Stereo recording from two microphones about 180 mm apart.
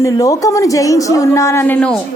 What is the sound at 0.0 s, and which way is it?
A woman's voice, 20° left (ahead or behind).